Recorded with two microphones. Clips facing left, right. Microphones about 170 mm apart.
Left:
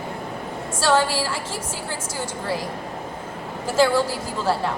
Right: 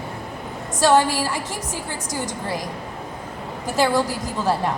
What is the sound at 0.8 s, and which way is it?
Speech, 15° right (ahead or behind).